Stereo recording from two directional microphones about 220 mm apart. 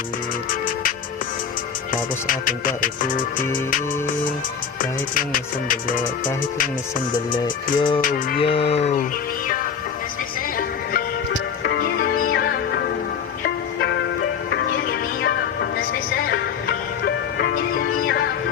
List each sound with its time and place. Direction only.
1.9 s music: 40° left (ahead or behind)
4.8 s music: 40° left (ahead or behind)
7.1 s music: 20° left (ahead or behind)
8.0 s music: 40° left (ahead or behind)
8.4 s music: 25° left (ahead or behind)
11.6 s music: 45° left (ahead or behind)
15.2 s music: 45° left (ahead or behind)